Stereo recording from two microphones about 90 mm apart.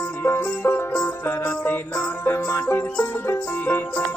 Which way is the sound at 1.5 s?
25° left (ahead or behind).